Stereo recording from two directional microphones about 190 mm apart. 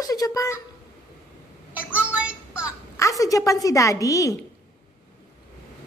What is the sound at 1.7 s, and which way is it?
Child singing, 5° right (ahead or behind).